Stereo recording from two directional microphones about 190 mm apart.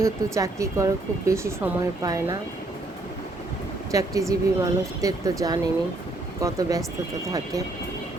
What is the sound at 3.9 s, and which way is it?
A woman's voice, 15° right (ahead or behind).